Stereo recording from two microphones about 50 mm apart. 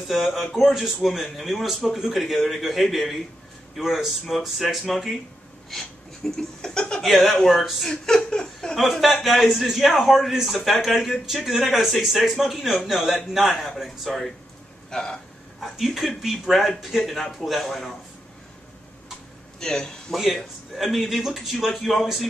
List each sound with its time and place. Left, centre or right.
0.1 s speech: centre
6.2 s a sound: centre
7.0 s speech: centre
7.9 s laughter: centre
9.0 s speech: centre
15.6 s speech: centre
19.6 s a sound: centre
20.1 s speech: centre